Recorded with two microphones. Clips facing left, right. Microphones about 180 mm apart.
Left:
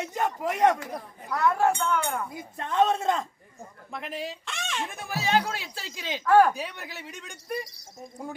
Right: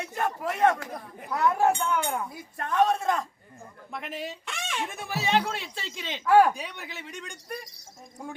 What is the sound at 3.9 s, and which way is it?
Speech, centre (ahead or behind).